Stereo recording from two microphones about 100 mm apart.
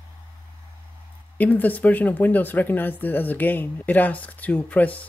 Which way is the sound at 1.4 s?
15° left (ahead or behind).